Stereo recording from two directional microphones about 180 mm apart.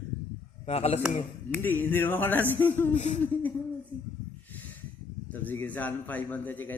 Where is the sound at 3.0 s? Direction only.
40° left (ahead or behind).